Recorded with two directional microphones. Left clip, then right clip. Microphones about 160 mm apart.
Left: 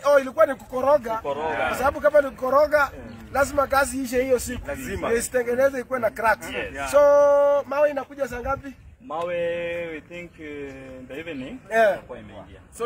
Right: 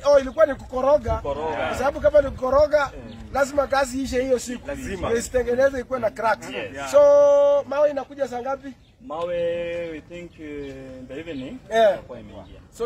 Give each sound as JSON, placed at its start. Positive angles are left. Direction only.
{"t": 0.0, "sound": "a man's voice", "side_deg": 0}
{"t": 4.8, "sound": "a man's voice", "side_deg": -20}
{"t": 5.1, "sound": "a man's voice", "side_deg": 0}
{"t": 9.1, "sound": "speech", "side_deg": 15}